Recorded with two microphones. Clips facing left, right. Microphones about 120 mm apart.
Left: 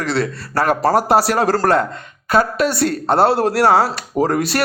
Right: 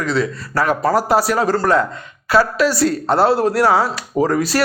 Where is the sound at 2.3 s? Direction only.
50° left (ahead or behind).